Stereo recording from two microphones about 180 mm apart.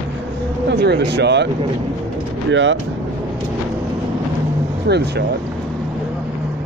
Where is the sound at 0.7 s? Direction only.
70° right (ahead or behind).